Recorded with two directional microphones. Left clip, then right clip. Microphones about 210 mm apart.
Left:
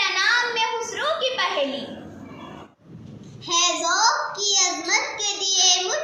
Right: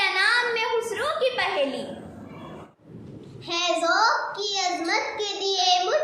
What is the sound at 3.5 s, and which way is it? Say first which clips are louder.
Child singing: left 2 dB; 20° right (ahead or behind).